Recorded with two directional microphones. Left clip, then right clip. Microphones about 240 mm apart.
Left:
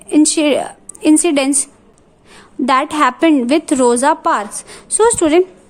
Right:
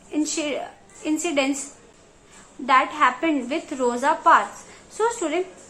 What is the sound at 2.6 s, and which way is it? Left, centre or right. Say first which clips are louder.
A woman's voice: left 5 dB; left.